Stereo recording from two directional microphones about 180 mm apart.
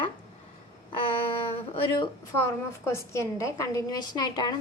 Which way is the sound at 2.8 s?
15° left (ahead or behind).